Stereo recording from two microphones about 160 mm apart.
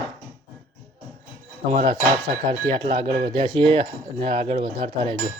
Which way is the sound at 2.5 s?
35° right (ahead or behind).